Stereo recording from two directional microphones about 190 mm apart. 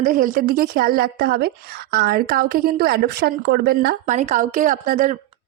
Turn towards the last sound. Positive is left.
turn(degrees=-40)  # may be behind; listen again after turning